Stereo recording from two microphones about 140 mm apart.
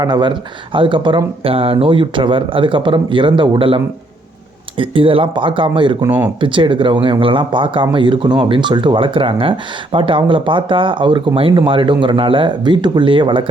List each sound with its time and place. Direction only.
0.0 s speech: 30° right (ahead or behind)
4.8 s speech: 40° right (ahead or behind)
6.0 s speech: 15° right (ahead or behind)
6.4 s speech: 35° right (ahead or behind)